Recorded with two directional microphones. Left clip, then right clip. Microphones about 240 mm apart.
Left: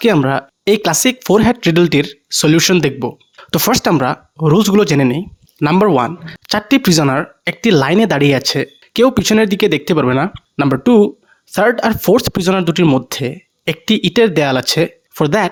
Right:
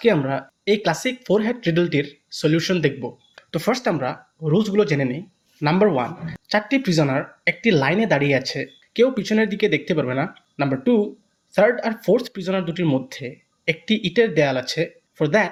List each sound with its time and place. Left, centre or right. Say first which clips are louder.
0.0 s speech: left 6 dB; left